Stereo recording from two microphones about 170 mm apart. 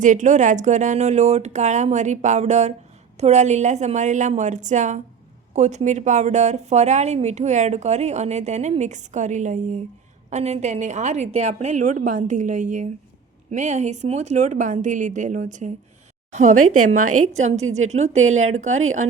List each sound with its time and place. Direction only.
0.0 s a woman's voice: 45° right (ahead or behind)